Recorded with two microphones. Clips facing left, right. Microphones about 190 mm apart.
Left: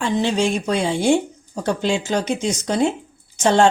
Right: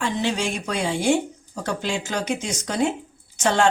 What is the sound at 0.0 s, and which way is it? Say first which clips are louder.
Speech: left 5 dB; 25° left (ahead or behind).